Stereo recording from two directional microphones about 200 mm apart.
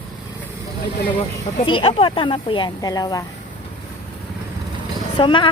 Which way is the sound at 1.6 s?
25° left (ahead or behind).